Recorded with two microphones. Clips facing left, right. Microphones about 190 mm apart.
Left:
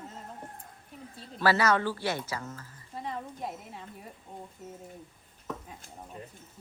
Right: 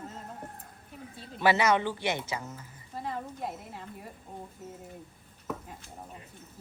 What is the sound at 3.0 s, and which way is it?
A woman's voice, centre (ahead or behind).